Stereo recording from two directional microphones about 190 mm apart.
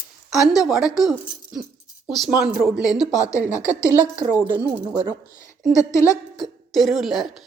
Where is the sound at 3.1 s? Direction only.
15° left (ahead or behind).